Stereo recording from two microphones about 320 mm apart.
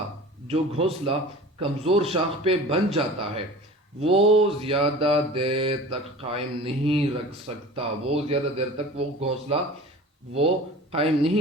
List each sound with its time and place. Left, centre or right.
0.4 s a man's voice: centre
1.5 s mantra: centre
10.9 s mantra: centre